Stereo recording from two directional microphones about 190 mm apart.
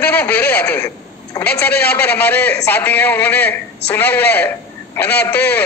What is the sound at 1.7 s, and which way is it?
Speech, 55° left (ahead or behind).